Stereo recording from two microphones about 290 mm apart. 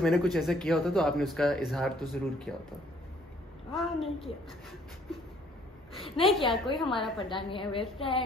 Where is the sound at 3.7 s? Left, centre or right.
Centre.